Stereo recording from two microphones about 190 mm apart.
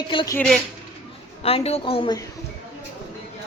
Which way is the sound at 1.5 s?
30° left (ahead or behind).